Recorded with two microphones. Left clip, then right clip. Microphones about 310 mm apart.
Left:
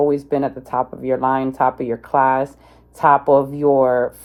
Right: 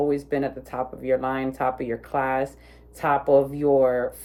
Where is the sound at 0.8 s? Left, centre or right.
Centre.